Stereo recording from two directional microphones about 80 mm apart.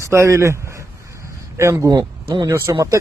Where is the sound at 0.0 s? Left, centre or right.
Right.